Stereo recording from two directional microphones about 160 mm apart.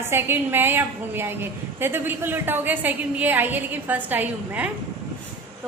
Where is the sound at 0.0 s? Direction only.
15° right (ahead or behind).